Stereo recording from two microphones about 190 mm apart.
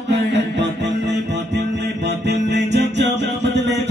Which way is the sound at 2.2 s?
65° right (ahead or behind).